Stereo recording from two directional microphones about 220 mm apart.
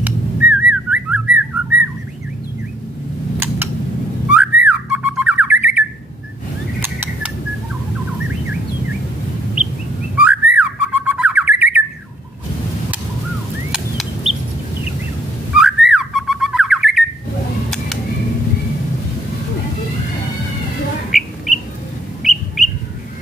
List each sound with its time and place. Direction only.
0.0 s whistling: 5° right (ahead or behind)
3.3 s a sound: 10° right (ahead or behind)
4.3 s bird: 5° right (ahead or behind)
6.8 s rodents: 10° right (ahead or behind)
10.1 s bird: 5° right (ahead or behind)
13.7 s bird: centre (ahead or behind)
15.5 s bird: centre (ahead or behind)
22.2 s bird: centre (ahead or behind)